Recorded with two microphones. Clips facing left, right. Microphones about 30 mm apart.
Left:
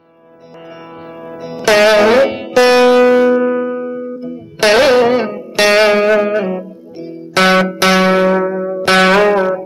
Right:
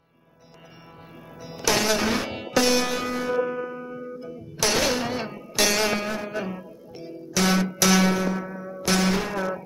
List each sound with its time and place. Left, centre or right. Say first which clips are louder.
1.4 s music: left 11 dB; left
1.7 s music: left 14 dB; left
3.3 s music: left 12 dB; left
4.6 s music: left 15 dB; left
6.3 s music: left 14 dB; left
7.3 s music: left 12 dB; left
7.8 s music: left 9 dB; left
8.8 s music: left 14 dB; left